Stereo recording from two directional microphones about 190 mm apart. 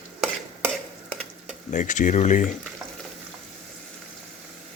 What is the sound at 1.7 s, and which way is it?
Speech, 40° left (ahead or behind).